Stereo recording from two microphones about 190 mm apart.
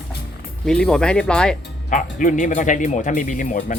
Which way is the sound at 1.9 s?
45° left (ahead or behind).